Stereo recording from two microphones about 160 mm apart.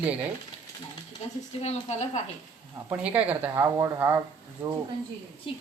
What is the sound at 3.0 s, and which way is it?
Speech, 10° right (ahead or behind).